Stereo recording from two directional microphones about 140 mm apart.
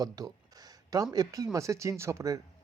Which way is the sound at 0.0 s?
25° right (ahead or behind).